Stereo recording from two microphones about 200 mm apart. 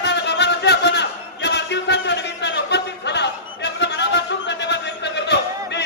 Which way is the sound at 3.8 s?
60° left (ahead or behind).